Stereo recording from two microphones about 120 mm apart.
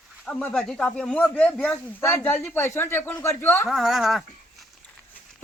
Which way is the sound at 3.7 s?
Centre (ahead or behind).